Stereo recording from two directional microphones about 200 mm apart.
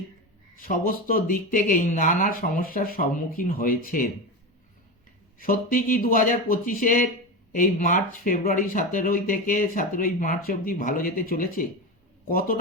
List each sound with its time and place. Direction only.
0.5 s speech: 45° left (ahead or behind)
5.4 s speech: 45° left (ahead or behind)